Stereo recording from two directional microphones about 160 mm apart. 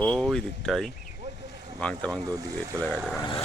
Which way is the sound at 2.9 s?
5° right (ahead or behind).